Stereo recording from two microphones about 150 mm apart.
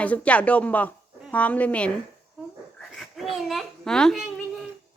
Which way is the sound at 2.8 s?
Centre (ahead or behind).